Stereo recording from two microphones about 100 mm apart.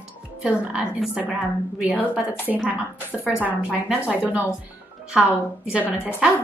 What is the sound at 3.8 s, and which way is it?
Speech, 10° right (ahead or behind).